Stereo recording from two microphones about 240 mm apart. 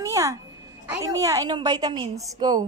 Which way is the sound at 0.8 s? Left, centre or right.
Centre.